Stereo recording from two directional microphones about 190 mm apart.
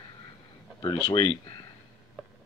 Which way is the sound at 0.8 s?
25° left (ahead or behind).